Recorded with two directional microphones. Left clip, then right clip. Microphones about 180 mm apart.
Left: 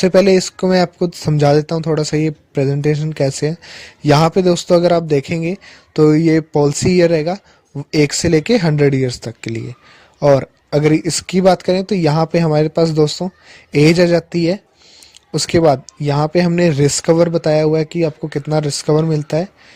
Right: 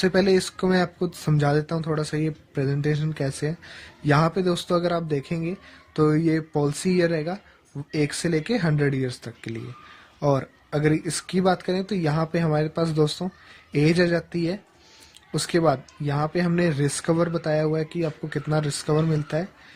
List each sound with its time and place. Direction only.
0.0 s speech: 40° left (ahead or behind)